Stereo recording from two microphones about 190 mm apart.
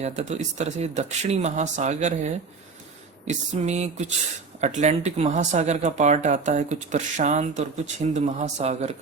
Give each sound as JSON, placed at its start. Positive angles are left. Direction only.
{"t": 0.0, "sound": "speech", "side_deg": -35}
{"t": 3.2, "sound": "speech", "side_deg": -40}